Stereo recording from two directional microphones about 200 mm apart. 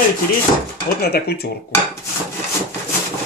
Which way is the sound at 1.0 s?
50° left (ahead or behind).